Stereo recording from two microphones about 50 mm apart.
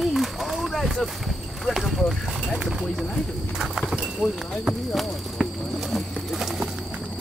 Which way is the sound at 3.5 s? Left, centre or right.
Centre.